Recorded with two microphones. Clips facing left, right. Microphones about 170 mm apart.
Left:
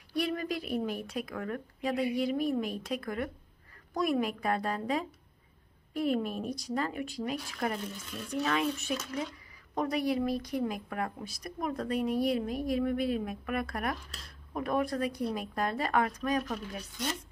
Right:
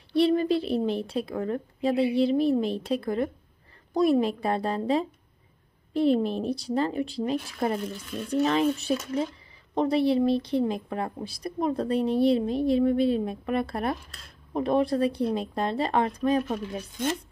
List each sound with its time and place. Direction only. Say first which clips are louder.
0.1 s a woman's voice: right 10 dB; 30° right (ahead or behind)